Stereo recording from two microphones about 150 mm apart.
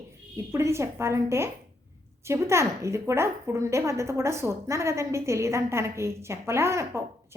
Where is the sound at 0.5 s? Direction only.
20° right (ahead or behind).